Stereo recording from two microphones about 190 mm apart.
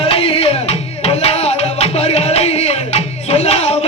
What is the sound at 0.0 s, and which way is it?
Music, 30° left (ahead or behind).